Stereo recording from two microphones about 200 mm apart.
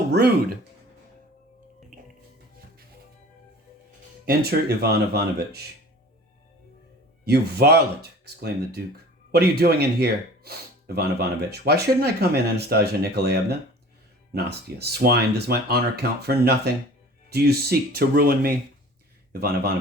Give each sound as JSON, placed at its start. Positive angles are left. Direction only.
{"t": 0.1, "sound": "speech", "side_deg": -55}
{"t": 4.3, "sound": "speech", "side_deg": -55}
{"t": 7.3, "sound": "speech", "side_deg": -55}